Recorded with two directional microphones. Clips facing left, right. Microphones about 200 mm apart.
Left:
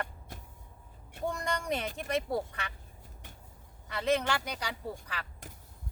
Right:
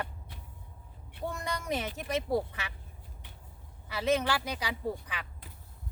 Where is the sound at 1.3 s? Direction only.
5° right (ahead or behind).